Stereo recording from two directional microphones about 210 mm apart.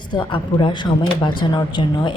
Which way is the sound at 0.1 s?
20° left (ahead or behind).